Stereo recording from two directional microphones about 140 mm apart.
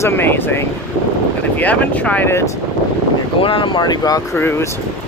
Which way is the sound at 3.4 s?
40° left (ahead or behind).